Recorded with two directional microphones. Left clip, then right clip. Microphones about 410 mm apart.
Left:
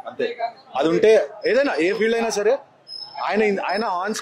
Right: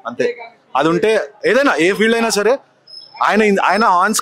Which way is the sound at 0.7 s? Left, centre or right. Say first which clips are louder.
Right 2 dB; right.